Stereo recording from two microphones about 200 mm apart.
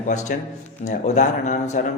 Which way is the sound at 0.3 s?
45° left (ahead or behind).